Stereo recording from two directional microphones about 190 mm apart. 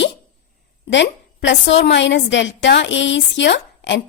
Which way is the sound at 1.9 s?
70° left (ahead or behind).